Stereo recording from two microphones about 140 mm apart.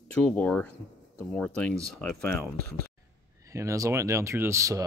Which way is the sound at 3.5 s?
20° right (ahead or behind).